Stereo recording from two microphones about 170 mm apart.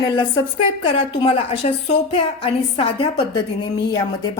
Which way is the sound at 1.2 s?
35° left (ahead or behind).